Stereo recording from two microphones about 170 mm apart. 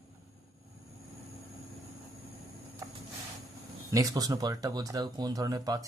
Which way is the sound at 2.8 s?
15° right (ahead or behind).